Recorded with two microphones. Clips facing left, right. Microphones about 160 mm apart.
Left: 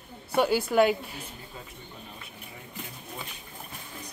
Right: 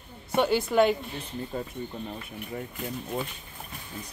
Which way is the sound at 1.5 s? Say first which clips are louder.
Right 13 dB; 55° right (ahead or behind).